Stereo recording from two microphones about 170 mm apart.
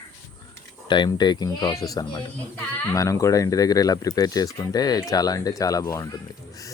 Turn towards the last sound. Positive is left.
turn(degrees=20)  # may be behind; listen again after turning